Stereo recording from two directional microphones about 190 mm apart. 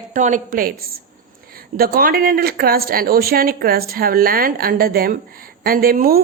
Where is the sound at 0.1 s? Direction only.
40° right (ahead or behind).